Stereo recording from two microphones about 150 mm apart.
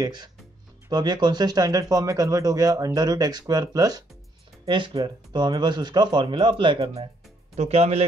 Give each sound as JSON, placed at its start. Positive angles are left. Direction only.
{"t": 0.0, "sound": "speech", "side_deg": -30}
{"t": 7.5, "sound": "speech", "side_deg": -45}